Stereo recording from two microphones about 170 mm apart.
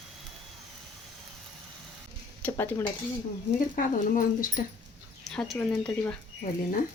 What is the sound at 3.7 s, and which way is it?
Speech, 55° left (ahead or behind).